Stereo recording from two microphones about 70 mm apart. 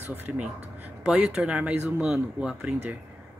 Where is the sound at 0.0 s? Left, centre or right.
Right.